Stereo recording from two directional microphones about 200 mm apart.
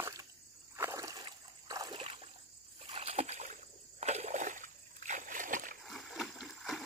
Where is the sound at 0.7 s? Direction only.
15° right (ahead or behind); by 5.7 s 40° right (ahead or behind).